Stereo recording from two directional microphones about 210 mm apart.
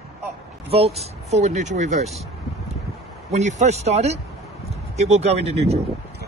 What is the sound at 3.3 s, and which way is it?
Speech, 35° right (ahead or behind).